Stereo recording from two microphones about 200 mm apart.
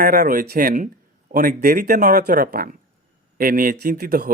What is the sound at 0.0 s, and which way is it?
Speech, 45° right (ahead or behind).